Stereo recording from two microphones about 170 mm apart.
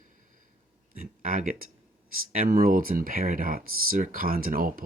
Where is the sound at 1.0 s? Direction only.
55° right (ahead or behind).